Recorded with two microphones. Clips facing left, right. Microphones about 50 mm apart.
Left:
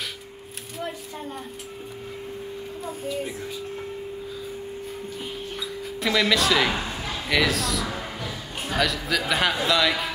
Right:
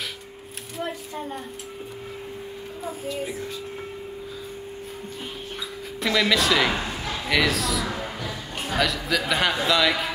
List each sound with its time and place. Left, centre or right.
2.8 s speech: centre
5.9 s speech: centre